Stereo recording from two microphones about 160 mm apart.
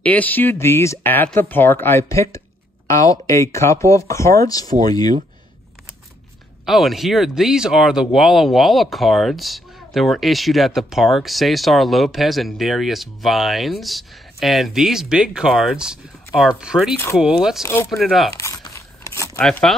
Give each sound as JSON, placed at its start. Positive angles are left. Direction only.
{"t": 0.0, "sound": "speech", "side_deg": 10}
{"t": 6.6, "sound": "speech", "side_deg": 0}
{"t": 17.6, "sound": "speech", "side_deg": 15}
{"t": 17.9, "sound": "speech", "side_deg": 0}
{"t": 18.3, "sound": "crumpling", "side_deg": 20}
{"t": 19.4, "sound": "speech", "side_deg": 0}